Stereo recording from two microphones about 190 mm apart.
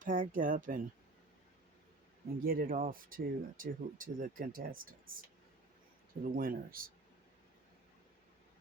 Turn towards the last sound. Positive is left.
turn(degrees=-50)  # may be behind; listen again after turning